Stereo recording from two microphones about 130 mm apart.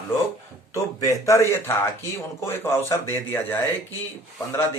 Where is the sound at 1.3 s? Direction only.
20° left (ahead or behind).